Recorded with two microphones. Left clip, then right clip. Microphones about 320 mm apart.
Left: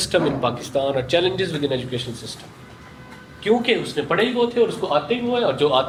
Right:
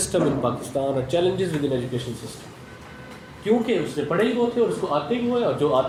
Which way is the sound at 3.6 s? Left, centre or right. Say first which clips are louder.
Left 3 dB; left.